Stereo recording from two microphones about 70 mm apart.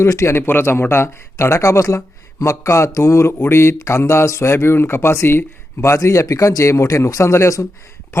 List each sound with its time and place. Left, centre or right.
0.0 s speech: left
3.8 s speech: left